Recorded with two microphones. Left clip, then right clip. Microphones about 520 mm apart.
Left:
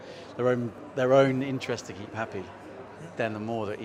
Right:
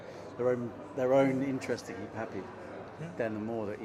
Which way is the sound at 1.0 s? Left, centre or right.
Left.